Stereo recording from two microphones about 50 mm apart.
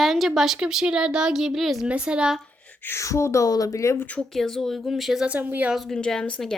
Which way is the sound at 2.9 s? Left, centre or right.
Left.